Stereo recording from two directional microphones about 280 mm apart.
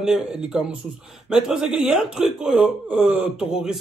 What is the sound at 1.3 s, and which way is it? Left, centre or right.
A man's voice, centre.